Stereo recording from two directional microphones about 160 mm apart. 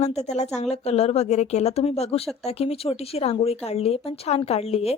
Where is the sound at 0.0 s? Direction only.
40° left (ahead or behind).